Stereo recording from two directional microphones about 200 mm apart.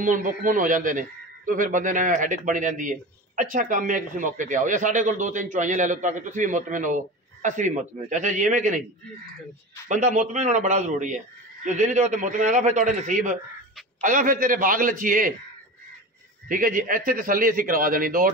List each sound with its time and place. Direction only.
0.0 s a man's voice: 40° right (ahead or behind)
9.8 s a man's voice: 40° right (ahead or behind)
16.4 s a man's voice: 45° right (ahead or behind)